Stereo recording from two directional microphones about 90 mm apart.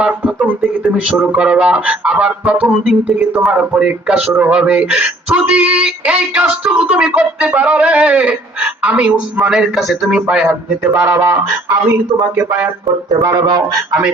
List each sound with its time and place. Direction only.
0.4 s speech: 20° right (ahead or behind)
11.1 s speech: 40° right (ahead or behind)
13.2 s a man's voice: 45° right (ahead or behind)